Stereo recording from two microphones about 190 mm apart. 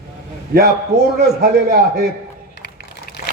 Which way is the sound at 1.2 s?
55° right (ahead or behind).